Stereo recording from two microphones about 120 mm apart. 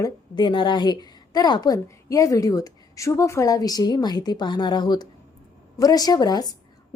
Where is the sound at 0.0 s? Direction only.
40° left (ahead or behind).